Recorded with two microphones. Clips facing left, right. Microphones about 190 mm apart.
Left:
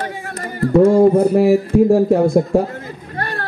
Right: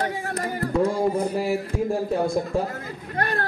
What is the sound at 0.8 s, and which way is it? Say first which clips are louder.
A man's voice: left 12 dB; 60° left (ahead or behind).